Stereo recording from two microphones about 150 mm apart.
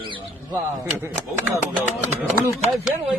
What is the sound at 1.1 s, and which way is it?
Music, 15° right (ahead or behind).